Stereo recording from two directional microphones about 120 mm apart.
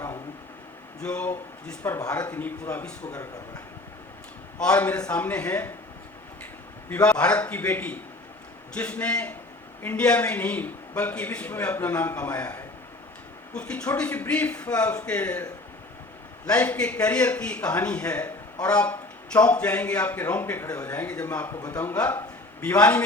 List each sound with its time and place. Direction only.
1.0 s a man's voice: 10° left (ahead or behind)
4.6 s a man's voice: 10° left (ahead or behind)
6.9 s a man's voice: 10° left (ahead or behind)
13.5 s a man's voice: 10° left (ahead or behind)
16.5 s a man's voice: 10° left (ahead or behind)